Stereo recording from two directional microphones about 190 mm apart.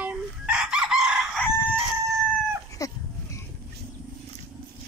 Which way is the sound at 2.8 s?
15° left (ahead or behind).